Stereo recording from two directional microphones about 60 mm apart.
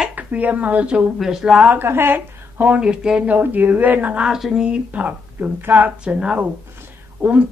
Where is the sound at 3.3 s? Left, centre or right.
Right.